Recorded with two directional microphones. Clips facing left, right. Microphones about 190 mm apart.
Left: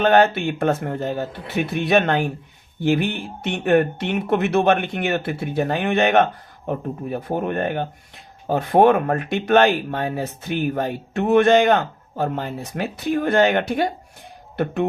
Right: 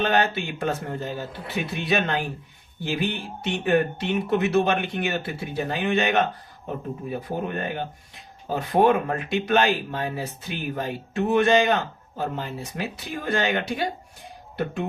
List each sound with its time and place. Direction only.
0.0 s speech: 50° left (ahead or behind)